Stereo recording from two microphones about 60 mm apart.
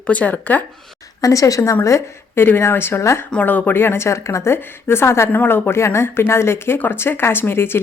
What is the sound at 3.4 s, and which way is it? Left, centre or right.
A woman's voice, left.